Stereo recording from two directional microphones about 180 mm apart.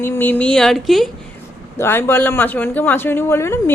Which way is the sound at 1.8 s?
10° left (ahead or behind).